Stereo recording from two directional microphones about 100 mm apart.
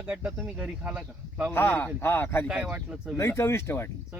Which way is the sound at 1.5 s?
20° left (ahead or behind).